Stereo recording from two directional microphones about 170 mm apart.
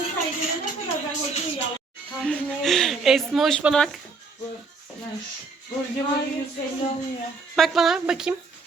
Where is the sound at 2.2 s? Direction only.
5° left (ahead or behind).